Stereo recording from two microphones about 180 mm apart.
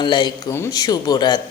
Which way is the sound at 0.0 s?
25° left (ahead or behind).